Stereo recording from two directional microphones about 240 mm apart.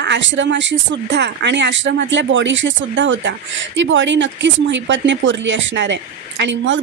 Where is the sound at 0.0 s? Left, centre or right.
Right.